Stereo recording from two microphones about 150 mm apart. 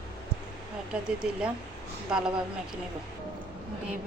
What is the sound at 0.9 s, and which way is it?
A woman's voice, 5° right (ahead or behind).